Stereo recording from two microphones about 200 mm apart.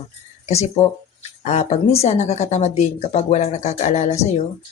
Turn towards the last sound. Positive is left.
turn(degrees=35)  # may be behind; listen again after turning